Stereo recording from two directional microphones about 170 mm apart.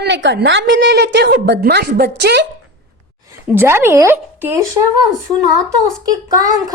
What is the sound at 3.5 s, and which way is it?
Speech, 15° right (ahead or behind).